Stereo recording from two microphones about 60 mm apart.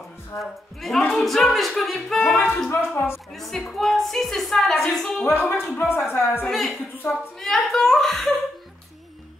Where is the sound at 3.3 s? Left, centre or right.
Centre.